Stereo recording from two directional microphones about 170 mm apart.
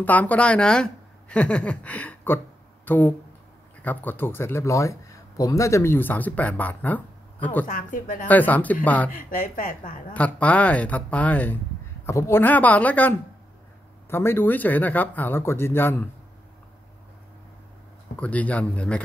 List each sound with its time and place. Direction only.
0.0 s a man's voice: 10° left (ahead or behind)
7.6 s speech: 55° left (ahead or behind)
8.3 s a man's voice: 10° left (ahead or behind)
9.3 s speech: 55° left (ahead or behind)
10.1 s a man's voice: 10° left (ahead or behind)
18.2 s a man's voice: 10° left (ahead or behind)